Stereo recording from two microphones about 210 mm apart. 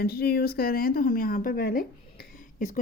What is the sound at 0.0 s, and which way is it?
A woman's voice, 45° left (ahead or behind).